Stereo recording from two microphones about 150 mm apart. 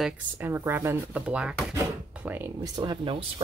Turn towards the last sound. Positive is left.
turn(degrees=-35)  # may be behind; listen again after turning